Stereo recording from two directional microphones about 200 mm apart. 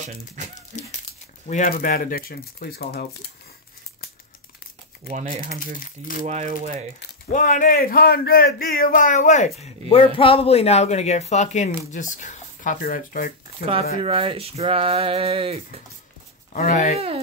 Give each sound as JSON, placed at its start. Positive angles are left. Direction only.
{"t": 1.5, "sound": "speech", "side_deg": 45}
{"t": 5.1, "sound": "speech", "side_deg": -30}
{"t": 7.3, "sound": "speech", "side_deg": 40}
{"t": 14.0, "sound": "a sound", "side_deg": -30}
{"t": 16.5, "sound": "speech", "side_deg": 40}